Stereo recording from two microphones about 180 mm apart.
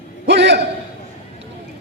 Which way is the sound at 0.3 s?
70° right (ahead or behind).